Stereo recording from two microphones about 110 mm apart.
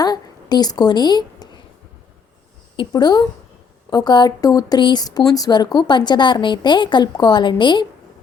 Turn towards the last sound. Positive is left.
turn(degrees=45)  # may be behind; listen again after turning